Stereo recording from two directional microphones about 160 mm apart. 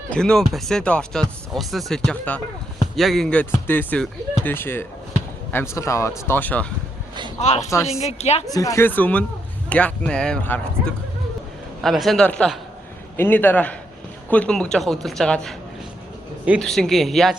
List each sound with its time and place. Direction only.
0.1 s speech: 5° left (ahead or behind)
7.3 s a woman's voice: 45° left (ahead or behind)
8.5 s speech: 20° left (ahead or behind); by 15.5 s 5° left (ahead or behind)
16.6 s speech: 5° left (ahead or behind)